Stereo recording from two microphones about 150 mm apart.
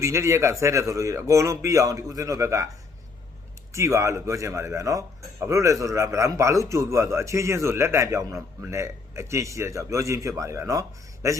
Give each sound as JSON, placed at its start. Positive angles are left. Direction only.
{"t": 0.0, "sound": "speech", "side_deg": -20}
{"t": 3.7, "sound": "speech", "side_deg": -20}